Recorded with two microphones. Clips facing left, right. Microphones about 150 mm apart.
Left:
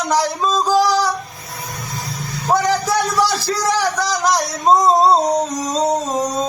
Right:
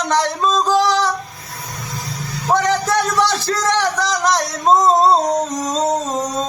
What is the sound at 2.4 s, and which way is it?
Speech, 5° left (ahead or behind).